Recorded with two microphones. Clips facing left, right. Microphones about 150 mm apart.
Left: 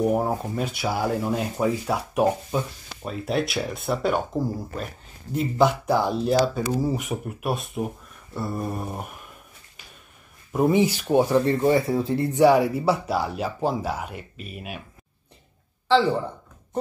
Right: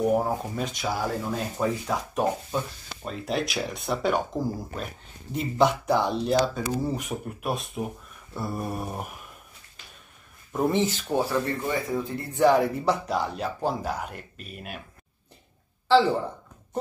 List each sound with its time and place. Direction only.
0.1 s speech: centre (ahead or behind)
10.5 s speech: 5° left (ahead or behind); by 12.3 s 30° left (ahead or behind)
12.4 s speech: 10° left (ahead or behind)